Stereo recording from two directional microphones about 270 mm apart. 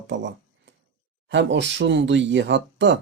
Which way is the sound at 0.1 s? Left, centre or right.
Right.